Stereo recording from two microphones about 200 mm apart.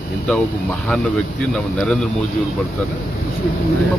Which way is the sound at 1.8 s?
Centre (ahead or behind).